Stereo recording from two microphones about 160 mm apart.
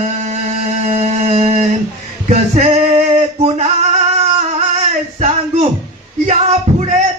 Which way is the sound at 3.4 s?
40° right (ahead or behind).